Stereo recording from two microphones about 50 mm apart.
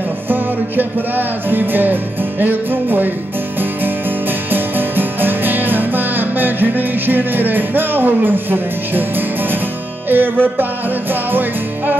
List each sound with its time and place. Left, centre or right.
0.3 s music: right
4.5 s music: right
10.0 s music: right